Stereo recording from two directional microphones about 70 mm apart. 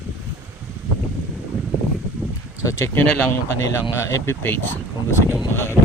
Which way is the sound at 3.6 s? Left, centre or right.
Left.